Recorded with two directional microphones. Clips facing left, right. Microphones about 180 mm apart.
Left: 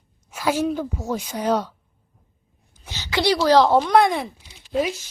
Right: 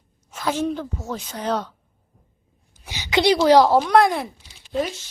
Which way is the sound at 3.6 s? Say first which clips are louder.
Even; 5° right (ahead or behind).